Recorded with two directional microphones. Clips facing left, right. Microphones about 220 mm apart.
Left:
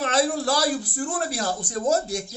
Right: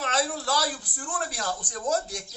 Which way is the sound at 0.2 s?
45° left (ahead or behind).